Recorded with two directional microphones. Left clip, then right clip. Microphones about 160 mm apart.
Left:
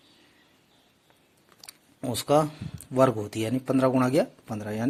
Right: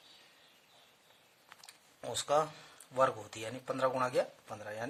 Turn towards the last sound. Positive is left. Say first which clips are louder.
# left 8 dB
turn(degrees=40)  # may be behind; listen again after turning